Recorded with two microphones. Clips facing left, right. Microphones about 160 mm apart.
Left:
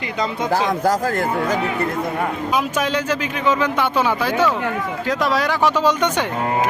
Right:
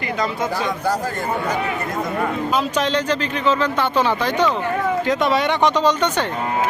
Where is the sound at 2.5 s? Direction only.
10° left (ahead or behind).